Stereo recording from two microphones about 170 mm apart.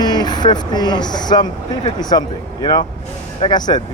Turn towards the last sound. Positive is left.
turn(degrees=25)  # may be behind; listen again after turning